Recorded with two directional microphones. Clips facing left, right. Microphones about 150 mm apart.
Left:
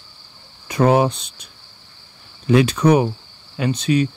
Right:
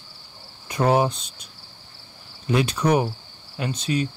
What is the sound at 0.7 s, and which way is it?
Cricket, 90° left.